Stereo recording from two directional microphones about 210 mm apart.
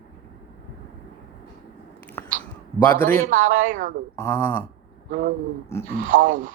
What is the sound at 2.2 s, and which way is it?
Whispering, 10° left (ahead or behind).